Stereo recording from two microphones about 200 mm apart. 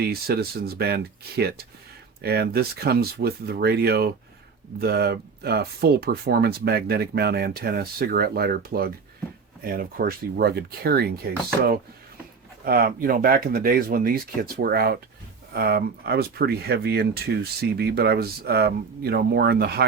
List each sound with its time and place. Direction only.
0.0 s speech: 50° right (ahead or behind)